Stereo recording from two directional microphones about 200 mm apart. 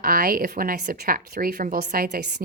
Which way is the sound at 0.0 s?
50° right (ahead or behind).